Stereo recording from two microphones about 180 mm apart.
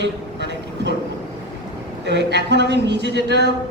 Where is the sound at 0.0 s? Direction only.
75° right (ahead or behind).